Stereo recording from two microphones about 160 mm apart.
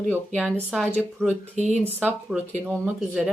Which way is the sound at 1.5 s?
45° right (ahead or behind).